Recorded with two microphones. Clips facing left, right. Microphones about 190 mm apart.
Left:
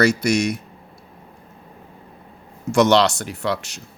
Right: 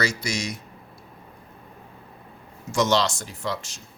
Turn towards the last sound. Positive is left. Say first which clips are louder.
# left 6 dB
turn(degrees=70)  # may be behind; listen again after turning